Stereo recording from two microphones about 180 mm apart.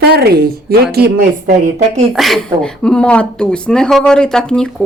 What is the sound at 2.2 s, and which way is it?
Speech, centre (ahead or behind).